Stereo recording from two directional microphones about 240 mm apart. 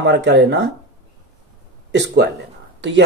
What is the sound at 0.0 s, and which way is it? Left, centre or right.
Speech, right.